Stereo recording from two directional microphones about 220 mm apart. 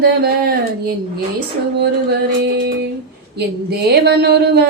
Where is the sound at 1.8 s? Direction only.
45° right (ahead or behind).